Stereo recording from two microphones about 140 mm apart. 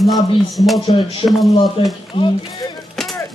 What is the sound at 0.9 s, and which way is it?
Speech, 30° left (ahead or behind).